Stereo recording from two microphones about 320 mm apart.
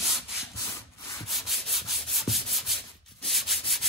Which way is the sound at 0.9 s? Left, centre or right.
Centre.